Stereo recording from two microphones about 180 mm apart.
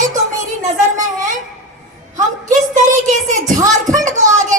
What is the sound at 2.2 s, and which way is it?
A woman's voice, 45° right (ahead or behind).